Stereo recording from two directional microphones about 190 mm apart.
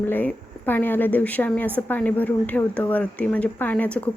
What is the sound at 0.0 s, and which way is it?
Speech, 10° left (ahead or behind).